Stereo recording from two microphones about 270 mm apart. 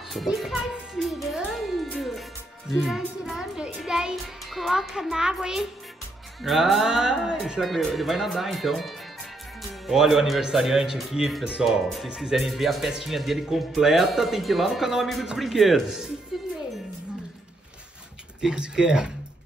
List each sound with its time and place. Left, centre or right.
0.1 s music: centre
2.8 s speech: centre
18.4 s speech: centre